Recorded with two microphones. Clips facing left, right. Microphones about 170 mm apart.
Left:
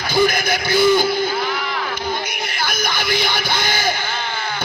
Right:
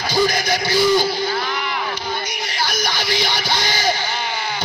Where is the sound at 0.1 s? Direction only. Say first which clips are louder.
Left 2 dB; 55° left (ahead or behind).